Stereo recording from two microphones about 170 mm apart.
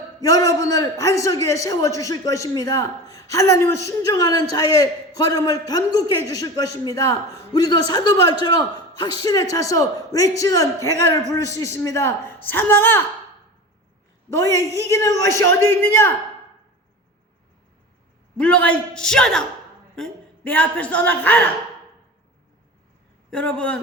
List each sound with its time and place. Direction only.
0.2 s a man's voice: 20° left (ahead or behind)
14.8 s a woman's voice: 15° left (ahead or behind)
18.3 s a man's voice: 5° left (ahead or behind)
23.3 s a woman's voice: 5° left (ahead or behind)